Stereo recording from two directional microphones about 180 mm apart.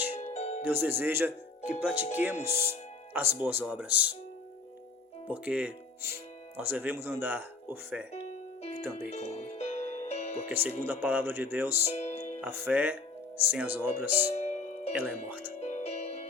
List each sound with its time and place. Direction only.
0.3 s music: 35° left (ahead or behind)
0.6 s speech: 10° right (ahead or behind)
5.3 s speech: 5° right (ahead or behind)
8.1 s keyboard: 35° left (ahead or behind)
9.0 s music: 35° left (ahead or behind)
10.5 s speech: 10° right (ahead or behind)
11.9 s music: 40° left (ahead or behind)
12.4 s speech: 10° right (ahead or behind)
14.3 s music: 40° left (ahead or behind)
15.3 s speech: 10° right (ahead or behind)
15.6 s music: 40° left (ahead or behind)